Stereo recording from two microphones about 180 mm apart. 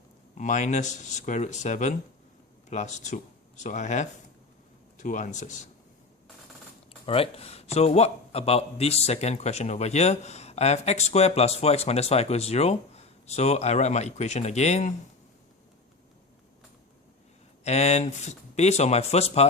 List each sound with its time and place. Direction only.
0.3 s speech: 40° left (ahead or behind)
7.0 s speech: 30° left (ahead or behind)
17.6 s speech: 35° left (ahead or behind)